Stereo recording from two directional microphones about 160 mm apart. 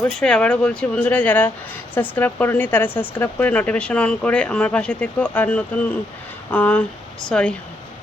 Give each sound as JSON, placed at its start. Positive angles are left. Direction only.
{"t": 0.0, "sound": "speech", "side_deg": 5}